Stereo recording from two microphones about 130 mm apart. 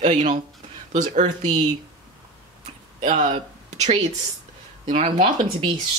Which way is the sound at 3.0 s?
65° right (ahead or behind).